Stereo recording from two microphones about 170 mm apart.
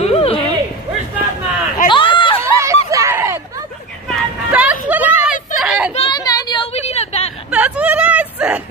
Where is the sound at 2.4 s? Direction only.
15° right (ahead or behind).